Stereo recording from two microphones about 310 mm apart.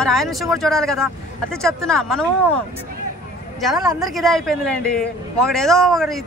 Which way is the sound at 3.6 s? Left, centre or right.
Centre.